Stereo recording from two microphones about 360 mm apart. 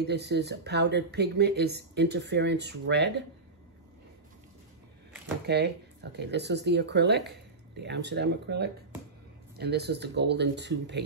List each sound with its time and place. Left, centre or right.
0.0 s speech: right
5.5 s speech: right